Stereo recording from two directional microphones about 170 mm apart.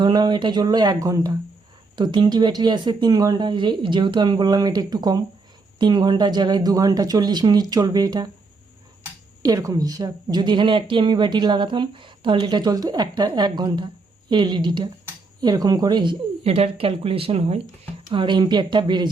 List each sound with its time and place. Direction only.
0.0 s a woman's voice: 25° right (ahead or behind)
9.4 s a woman's voice: 20° right (ahead or behind)